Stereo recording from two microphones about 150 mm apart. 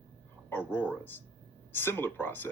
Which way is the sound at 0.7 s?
10° left (ahead or behind).